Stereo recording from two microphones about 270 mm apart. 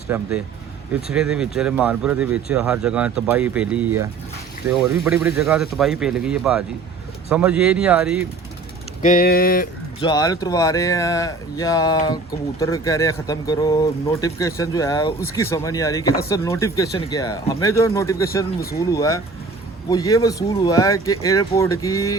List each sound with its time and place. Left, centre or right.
0.1 s speech: centre
9.0 s a sound: left
10.0 s speech: centre